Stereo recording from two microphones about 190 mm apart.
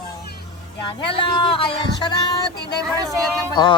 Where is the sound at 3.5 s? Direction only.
25° left (ahead or behind).